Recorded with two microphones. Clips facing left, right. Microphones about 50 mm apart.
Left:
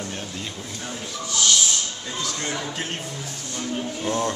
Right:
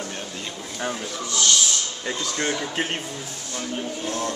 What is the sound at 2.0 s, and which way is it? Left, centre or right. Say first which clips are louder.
Speech: right 5 dB; right.